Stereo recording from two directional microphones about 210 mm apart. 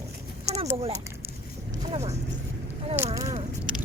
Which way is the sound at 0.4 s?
30° right (ahead or behind).